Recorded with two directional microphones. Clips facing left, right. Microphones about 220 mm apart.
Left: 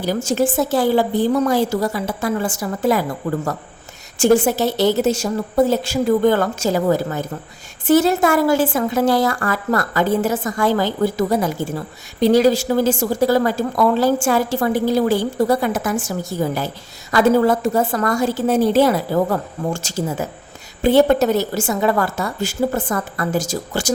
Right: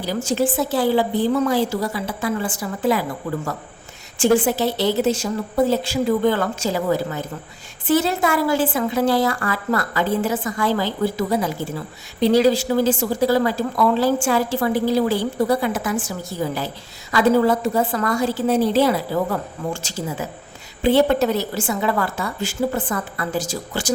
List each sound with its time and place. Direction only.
0.0 s a woman's voice: 45° left (ahead or behind)
4.2 s a woman's voice: 40° left (ahead or behind)